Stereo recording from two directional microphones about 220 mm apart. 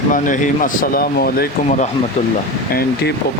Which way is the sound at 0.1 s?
35° left (ahead or behind).